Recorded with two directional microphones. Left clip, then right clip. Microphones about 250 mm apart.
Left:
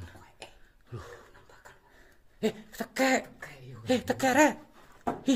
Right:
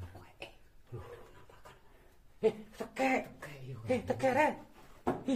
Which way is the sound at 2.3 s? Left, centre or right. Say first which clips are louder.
Even; left.